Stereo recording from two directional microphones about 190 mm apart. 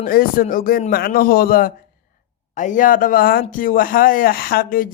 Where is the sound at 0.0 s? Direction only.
50° left (ahead or behind).